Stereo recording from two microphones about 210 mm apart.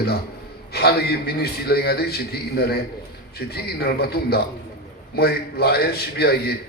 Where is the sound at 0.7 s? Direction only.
50° left (ahead or behind).